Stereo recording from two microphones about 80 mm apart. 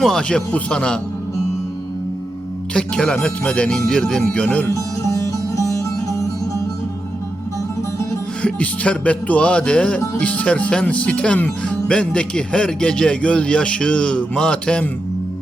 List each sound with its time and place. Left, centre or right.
0.0 s music: centre
2.7 s music: centre
4.7 s music: left
8.4 s music: centre